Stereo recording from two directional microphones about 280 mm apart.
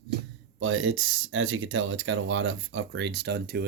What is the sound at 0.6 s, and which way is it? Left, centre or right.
Speech, right.